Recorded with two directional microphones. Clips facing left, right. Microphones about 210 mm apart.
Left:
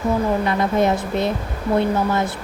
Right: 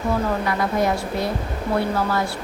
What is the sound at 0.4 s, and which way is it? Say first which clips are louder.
Speech: left 3 dB; 25° left (ahead or behind).